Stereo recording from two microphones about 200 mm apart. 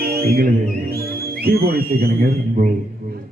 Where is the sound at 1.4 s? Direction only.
50° right (ahead or behind).